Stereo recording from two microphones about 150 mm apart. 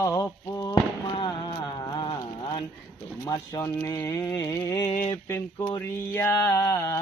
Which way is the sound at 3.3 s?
20° left (ahead or behind).